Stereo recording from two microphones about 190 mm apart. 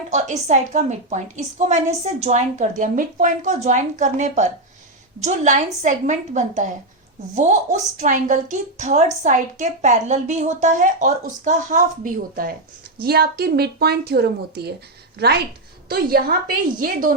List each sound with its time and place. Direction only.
0.1 s a woman's voice: 35° right (ahead or behind); by 14.7 s 55° right (ahead or behind)
15.9 s a woman's voice: 50° right (ahead or behind)